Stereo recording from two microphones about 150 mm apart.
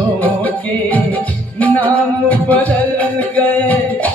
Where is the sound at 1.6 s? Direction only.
10° left (ahead or behind).